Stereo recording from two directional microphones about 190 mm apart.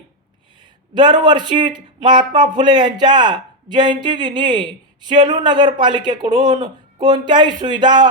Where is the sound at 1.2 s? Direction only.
25° right (ahead or behind).